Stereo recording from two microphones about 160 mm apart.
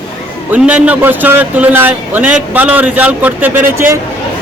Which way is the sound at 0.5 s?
10° right (ahead or behind).